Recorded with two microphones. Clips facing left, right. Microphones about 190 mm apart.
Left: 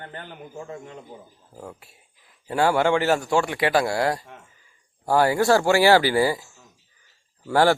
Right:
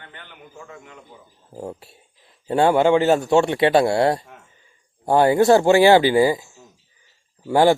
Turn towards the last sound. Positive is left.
turn(degrees=-20)  # may be behind; listen again after turning